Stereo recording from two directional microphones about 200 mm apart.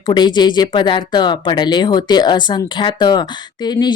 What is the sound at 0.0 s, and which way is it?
Speech, 20° left (ahead or behind).